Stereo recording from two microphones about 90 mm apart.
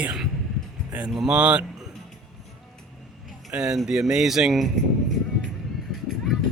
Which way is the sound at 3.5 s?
10° right (ahead or behind).